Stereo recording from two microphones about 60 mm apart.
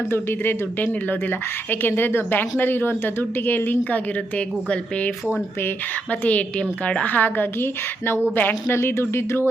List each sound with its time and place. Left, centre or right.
0.1 s a woman's voice: left